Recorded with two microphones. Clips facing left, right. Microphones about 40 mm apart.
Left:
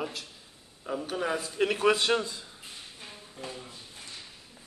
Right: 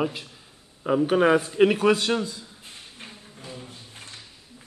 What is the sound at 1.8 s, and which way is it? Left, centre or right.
Speech, centre.